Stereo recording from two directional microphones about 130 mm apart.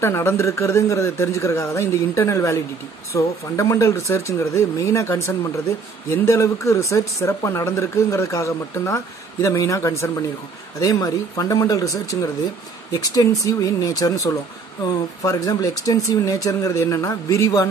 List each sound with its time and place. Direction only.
0.0 s speech: 20° left (ahead or behind)